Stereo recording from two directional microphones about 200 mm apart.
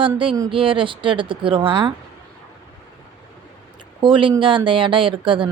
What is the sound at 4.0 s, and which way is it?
Speech, 25° right (ahead or behind).